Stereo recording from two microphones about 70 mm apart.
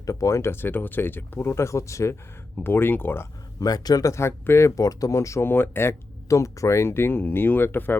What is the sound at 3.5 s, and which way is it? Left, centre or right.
Speech, left.